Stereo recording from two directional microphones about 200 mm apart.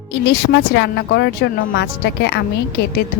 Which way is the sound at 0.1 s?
65° left (ahead or behind).